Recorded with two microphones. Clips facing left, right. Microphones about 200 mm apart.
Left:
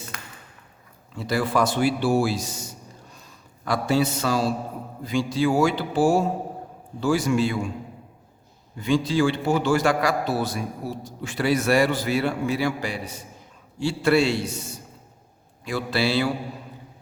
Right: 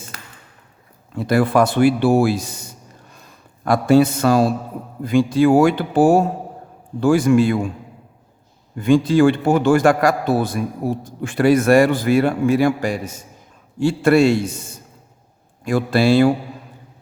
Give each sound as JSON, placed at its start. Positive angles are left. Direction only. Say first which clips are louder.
{"t": 1.1, "sound": "a man's voice", "louder": "right 7 dB", "side_deg": -55}
{"t": 8.7, "sound": "a man's voice", "louder": "right 7 dB", "side_deg": -55}